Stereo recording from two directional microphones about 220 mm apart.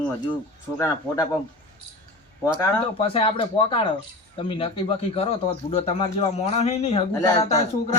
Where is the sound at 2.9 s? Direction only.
25° left (ahead or behind).